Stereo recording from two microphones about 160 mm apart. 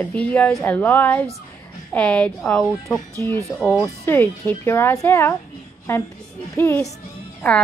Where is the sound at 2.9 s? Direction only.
20° left (ahead or behind).